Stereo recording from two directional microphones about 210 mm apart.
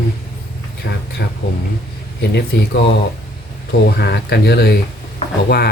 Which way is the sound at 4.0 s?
50° left (ahead or behind).